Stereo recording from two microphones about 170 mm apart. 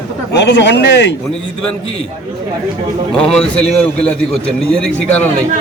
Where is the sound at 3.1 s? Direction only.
5° left (ahead or behind).